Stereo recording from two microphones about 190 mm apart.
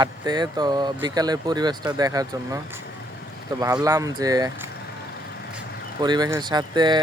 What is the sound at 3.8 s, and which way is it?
Speech, 15° right (ahead or behind).